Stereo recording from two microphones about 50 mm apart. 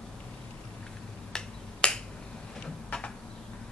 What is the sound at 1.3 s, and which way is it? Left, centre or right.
Finger snapping, centre.